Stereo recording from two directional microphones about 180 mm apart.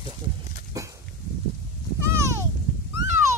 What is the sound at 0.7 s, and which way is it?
Dog, 15° right (ahead or behind).